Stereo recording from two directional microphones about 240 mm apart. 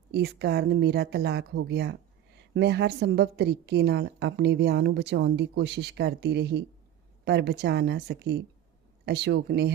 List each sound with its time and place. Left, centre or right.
0.1 s a woman's voice: right